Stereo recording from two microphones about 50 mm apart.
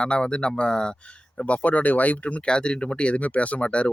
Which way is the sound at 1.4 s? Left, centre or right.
Left.